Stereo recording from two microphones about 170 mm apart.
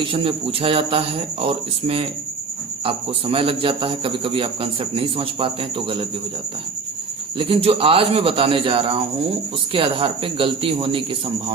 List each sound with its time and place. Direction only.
0.0 s a man's voice: 30° right (ahead or behind)
7.3 s a man's voice: 30° right (ahead or behind)